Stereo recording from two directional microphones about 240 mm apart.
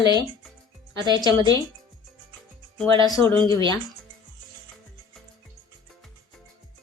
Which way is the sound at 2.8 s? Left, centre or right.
Centre.